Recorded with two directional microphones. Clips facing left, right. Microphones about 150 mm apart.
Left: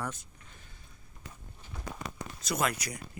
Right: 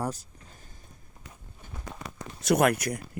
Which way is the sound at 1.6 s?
50° right (ahead or behind).